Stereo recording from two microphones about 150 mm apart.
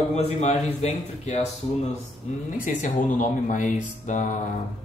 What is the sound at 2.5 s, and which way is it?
Speech, 60° left (ahead or behind).